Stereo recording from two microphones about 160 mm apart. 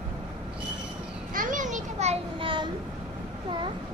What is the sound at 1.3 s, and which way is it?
Children playing, 55° right (ahead or behind).